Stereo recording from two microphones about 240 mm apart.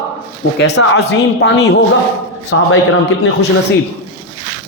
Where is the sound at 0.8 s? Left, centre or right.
Left.